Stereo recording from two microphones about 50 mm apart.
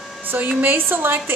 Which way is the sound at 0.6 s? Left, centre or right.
Right.